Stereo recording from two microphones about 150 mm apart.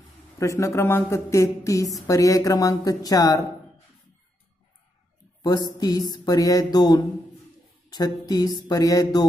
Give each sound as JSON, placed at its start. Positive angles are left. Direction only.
{"t": 0.4, "sound": "speech", "side_deg": 20}
{"t": 5.4, "sound": "speech", "side_deg": 25}